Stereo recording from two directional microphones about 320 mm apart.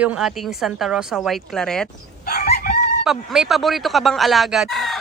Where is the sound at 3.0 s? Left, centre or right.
Centre.